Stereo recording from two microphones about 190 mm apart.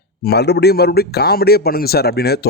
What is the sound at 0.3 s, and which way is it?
A man's voice, 60° left (ahead or behind).